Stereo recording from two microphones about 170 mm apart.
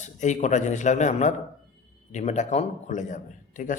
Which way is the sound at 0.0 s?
45° left (ahead or behind).